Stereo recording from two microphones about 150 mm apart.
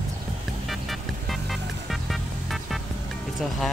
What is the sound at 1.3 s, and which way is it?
Music, centre (ahead or behind).